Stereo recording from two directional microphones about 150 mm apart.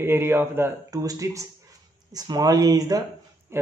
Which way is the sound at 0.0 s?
15° right (ahead or behind).